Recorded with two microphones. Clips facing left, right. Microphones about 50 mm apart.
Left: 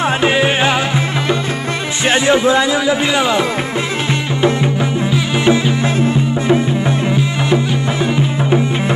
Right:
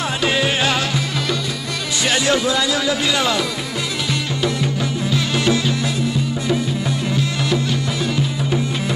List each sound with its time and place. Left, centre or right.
0.2 s music: left
2.0 s a man's voice: left
5.1 s music: left
5.9 s music: left